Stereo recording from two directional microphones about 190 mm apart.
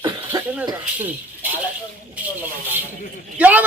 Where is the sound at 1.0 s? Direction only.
10° right (ahead or behind).